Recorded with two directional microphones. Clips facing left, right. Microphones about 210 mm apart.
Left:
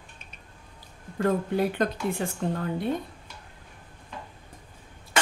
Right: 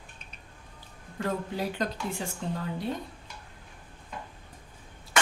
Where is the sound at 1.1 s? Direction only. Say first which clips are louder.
Left 7 dB; 55° left (ahead or behind).